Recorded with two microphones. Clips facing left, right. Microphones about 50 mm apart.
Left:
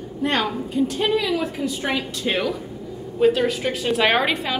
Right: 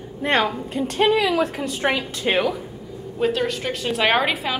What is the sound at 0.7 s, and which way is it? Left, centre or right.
A woman's voice, right.